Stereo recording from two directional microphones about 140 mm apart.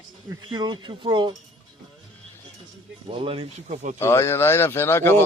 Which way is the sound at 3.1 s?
40° right (ahead or behind).